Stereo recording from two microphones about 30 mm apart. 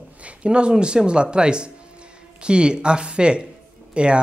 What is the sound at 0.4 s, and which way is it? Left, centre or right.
Speech, right.